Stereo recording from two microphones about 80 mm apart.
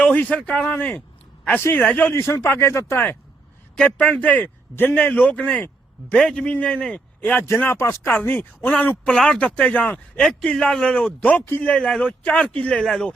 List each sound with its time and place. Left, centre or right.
0.0 s a man's voice: centre
2.1 s speech: left
3.8 s a man's voice: centre
7.2 s a man's voice: left
9.0 s a man's voice: centre
10.2 s a man's voice: centre
11.7 s a man's voice: centre